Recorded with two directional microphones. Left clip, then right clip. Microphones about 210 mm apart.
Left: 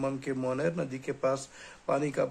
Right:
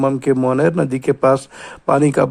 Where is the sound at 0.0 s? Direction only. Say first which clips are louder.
Right 16 dB; 40° right (ahead or behind).